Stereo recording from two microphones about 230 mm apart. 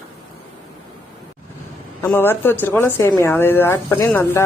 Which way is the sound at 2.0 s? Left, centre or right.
Centre.